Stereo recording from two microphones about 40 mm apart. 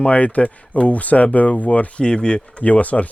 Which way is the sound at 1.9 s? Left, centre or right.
Left.